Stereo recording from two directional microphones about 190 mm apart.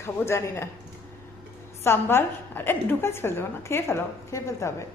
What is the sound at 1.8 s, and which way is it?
A woman's voice, 15° left (ahead or behind).